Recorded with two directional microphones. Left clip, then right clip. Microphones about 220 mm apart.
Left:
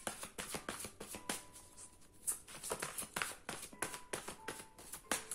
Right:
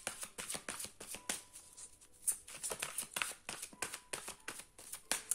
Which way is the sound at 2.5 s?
20° right (ahead or behind).